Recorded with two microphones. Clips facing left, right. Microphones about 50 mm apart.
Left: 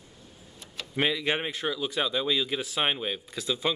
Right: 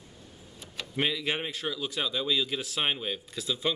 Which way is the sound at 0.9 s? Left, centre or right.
Centre.